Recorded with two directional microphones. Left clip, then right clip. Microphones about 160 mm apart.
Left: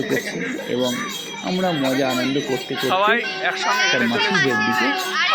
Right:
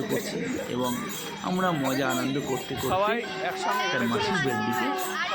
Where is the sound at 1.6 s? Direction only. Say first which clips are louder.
Left 6 dB; 20° left (ahead or behind).